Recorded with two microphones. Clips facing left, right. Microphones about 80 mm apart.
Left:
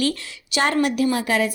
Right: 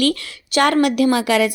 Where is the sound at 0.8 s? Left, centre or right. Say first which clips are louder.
Right 5 dB; right.